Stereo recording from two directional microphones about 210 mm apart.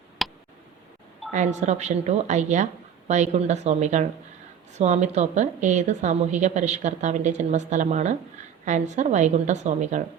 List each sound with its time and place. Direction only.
0.2 s tick: centre (ahead or behind)
1.3 s a woman's voice: 35° right (ahead or behind)